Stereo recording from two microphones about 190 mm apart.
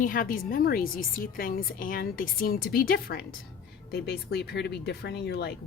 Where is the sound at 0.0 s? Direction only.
45° left (ahead or behind).